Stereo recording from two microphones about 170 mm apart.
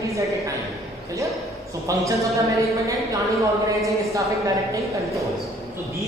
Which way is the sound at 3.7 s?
20° right (ahead or behind).